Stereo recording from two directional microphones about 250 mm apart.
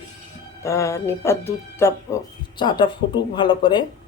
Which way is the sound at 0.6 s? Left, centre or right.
Centre.